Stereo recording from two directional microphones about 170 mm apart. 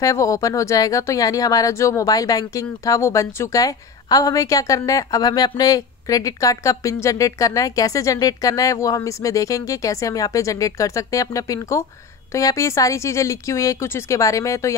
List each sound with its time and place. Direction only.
0.0 s speech: 20° left (ahead or behind)